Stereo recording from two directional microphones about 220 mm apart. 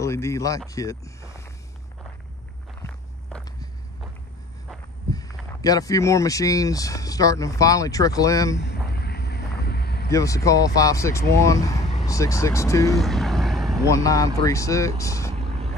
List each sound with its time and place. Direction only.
0.0 s speech: 15° left (ahead or behind)
2.8 s walk: 5° left (ahead or behind)
5.1 s speech: 15° left (ahead or behind)
8.5 s vehicle: 50° left (ahead or behind)
10.1 s speech: 15° left (ahead or behind)
11.8 s vehicle: 30° left (ahead or behind)
12.1 s speech: 15° left (ahead or behind)
12.9 s vehicle: centre (ahead or behind)
13.8 s speech: 15° left (ahead or behind)
15.3 s vehicle: 25° right (ahead or behind)